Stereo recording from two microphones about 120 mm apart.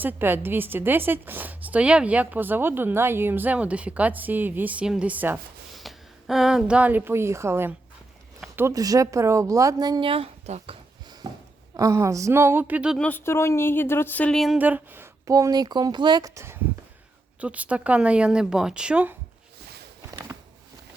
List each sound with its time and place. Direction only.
0.0 s a woman's voice: 15° right (ahead or behind)
5.7 s a woman's voice: centre (ahead or behind); by 10.1 s 35° right (ahead or behind)
10.1 s speech: 60° right (ahead or behind)
11.2 s a sound: 30° right (ahead or behind)
11.8 s speech: 25° right (ahead or behind)
13.0 s a woman's voice: 15° left (ahead or behind)
14.3 s speech: centre (ahead or behind)
14.6 s a woman's voice: 15° right (ahead or behind)
15.3 s speech: 30° right (ahead or behind)
16.3 s speech: 25° right (ahead or behind)
17.4 s a woman's voice: 10° right (ahead or behind)